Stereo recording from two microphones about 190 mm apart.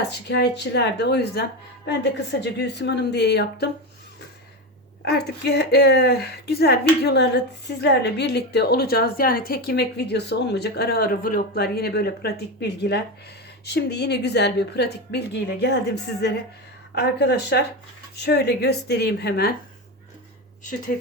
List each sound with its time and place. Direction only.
0.1 s speech: 60° left (ahead or behind)
5.0 s speech: 60° left (ahead or behind)